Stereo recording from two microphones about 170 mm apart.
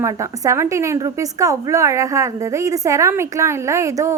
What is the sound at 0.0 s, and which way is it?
A woman's voice, 15° right (ahead or behind).